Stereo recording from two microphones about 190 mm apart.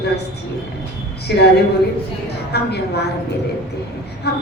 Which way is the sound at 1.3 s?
60° left (ahead or behind).